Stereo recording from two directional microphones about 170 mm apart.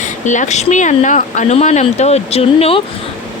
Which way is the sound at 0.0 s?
45° left (ahead or behind).